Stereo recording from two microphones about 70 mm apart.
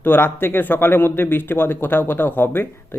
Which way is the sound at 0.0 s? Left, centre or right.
Left.